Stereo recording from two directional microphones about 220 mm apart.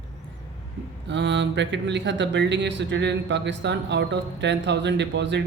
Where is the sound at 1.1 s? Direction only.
55° right (ahead or behind).